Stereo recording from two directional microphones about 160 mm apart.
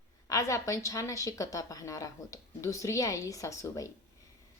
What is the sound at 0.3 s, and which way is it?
A woman's voice, 20° left (ahead or behind).